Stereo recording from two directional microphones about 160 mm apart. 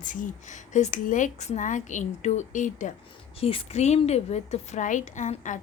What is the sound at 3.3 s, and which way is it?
A woman's voice, 40° left (ahead or behind).